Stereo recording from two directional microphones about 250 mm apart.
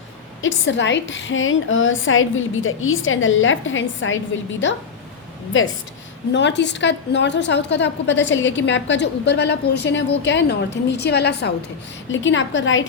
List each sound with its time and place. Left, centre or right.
0.4 s a woman's voice: left
6.3 s a woman's voice: left